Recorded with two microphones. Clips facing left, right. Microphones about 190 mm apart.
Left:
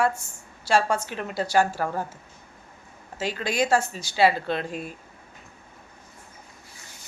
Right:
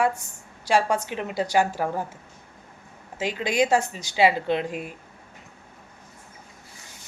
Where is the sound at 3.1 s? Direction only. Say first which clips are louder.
Right 2 dB; 15° right (ahead or behind).